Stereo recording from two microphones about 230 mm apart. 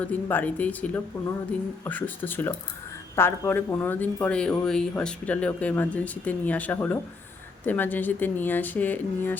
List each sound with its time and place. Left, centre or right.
0.0 s speech: centre